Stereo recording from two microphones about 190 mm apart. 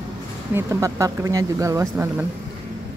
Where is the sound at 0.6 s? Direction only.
15° right (ahead or behind).